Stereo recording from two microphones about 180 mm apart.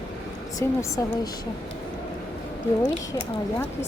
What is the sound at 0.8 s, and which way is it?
Speech, 20° left (ahead or behind).